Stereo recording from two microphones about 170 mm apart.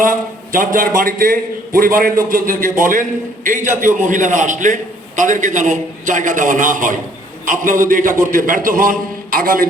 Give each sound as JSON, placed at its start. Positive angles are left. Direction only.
{"t": 0.0, "sound": "a man's voice", "side_deg": -55}